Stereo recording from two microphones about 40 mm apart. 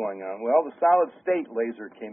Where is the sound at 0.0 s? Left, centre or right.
Centre.